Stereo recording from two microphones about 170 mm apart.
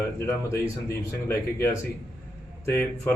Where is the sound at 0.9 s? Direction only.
15° left (ahead or behind).